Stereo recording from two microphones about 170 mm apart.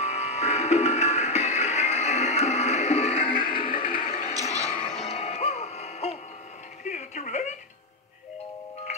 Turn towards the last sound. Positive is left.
turn(degrees=45)  # may be behind; listen again after turning